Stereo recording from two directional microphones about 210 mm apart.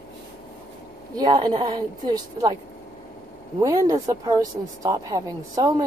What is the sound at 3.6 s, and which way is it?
Speech, 15° right (ahead or behind).